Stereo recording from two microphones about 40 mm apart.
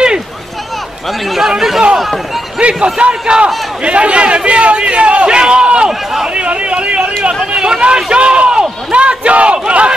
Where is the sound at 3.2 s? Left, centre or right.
Right.